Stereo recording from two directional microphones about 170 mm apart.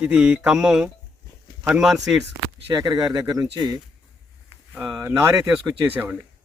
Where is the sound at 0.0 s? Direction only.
5° right (ahead or behind).